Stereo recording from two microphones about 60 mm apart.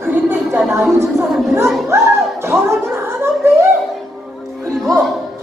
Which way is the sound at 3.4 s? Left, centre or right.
Right.